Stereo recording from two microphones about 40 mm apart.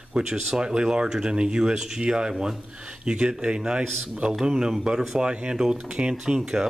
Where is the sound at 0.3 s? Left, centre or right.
Centre.